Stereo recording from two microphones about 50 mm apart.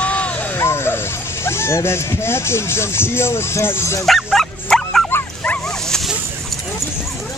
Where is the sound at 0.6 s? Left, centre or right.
Left.